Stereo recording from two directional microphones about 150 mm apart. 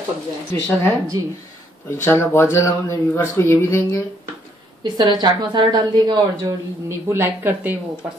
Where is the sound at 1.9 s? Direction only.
15° left (ahead or behind).